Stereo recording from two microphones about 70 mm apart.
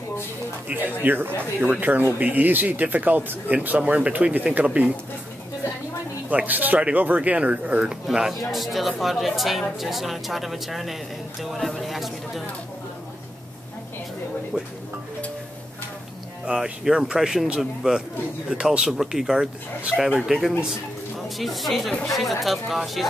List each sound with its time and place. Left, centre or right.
0.7 s speech: right
6.3 s speech: right; by 12.4 s centre
14.5 s a man's voice: centre
16.4 s a man's voice: centre